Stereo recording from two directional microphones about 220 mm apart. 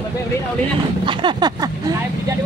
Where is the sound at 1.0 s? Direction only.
20° right (ahead or behind).